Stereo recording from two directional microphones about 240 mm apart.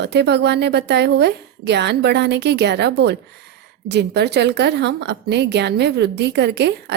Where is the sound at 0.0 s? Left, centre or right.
Right.